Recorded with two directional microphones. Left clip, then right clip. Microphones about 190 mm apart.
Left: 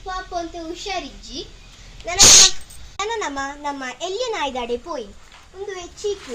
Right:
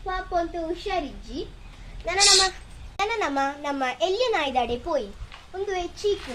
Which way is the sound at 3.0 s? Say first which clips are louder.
Even; 15° right (ahead or behind).